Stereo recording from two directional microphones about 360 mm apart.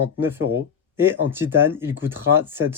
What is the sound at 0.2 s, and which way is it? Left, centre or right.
Speech, centre.